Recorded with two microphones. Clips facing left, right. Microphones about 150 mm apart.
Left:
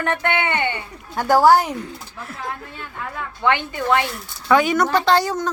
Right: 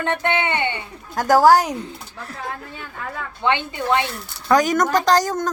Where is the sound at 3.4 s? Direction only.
20° right (ahead or behind).